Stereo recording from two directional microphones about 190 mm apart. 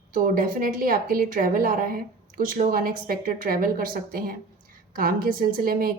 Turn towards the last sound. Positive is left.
turn(degrees=-50)  # may be behind; listen again after turning